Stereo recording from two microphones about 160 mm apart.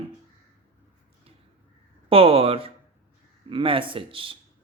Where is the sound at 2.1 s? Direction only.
35° right (ahead or behind).